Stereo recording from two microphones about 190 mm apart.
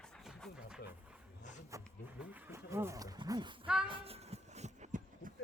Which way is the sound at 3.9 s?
30° right (ahead or behind).